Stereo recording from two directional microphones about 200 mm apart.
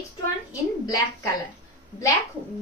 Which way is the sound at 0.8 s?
15° left (ahead or behind).